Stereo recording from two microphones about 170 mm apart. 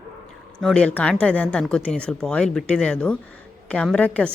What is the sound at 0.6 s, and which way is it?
Speech, 5° left (ahead or behind).